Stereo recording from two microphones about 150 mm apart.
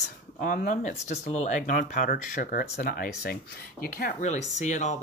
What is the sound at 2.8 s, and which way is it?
Speech, 80° left.